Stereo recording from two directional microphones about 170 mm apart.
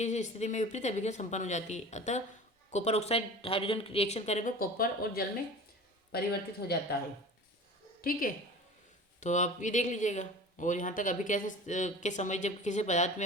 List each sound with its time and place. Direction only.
0.0 s a man's voice: 40° left (ahead or behind); by 6.7 s 65° left (ahead or behind)
9.2 s speech: 45° left (ahead or behind)